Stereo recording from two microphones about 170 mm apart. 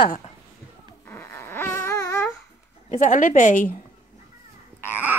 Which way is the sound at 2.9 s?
50° left (ahead or behind).